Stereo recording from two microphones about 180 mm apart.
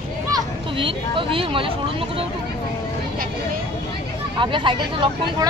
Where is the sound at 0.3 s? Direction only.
30° right (ahead or behind).